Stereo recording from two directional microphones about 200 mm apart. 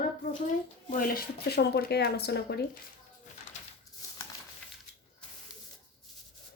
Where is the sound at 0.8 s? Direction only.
45° left (ahead or behind).